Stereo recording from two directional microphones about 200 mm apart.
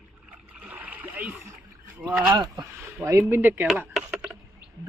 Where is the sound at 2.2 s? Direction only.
20° right (ahead or behind).